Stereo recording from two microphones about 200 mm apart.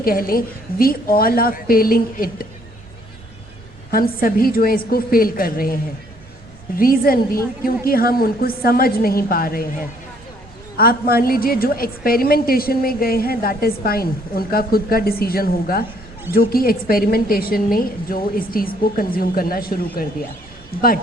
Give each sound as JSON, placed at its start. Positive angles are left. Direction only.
{"t": 0.0, "sound": "a woman's voice", "side_deg": 45}
{"t": 3.9, "sound": "a woman's voice", "side_deg": 45}
{"t": 10.8, "sound": "a woman's voice", "side_deg": 50}